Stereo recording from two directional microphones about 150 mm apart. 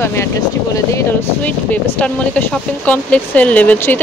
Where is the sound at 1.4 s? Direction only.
10° left (ahead or behind).